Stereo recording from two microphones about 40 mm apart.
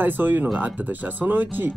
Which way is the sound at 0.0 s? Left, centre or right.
Right.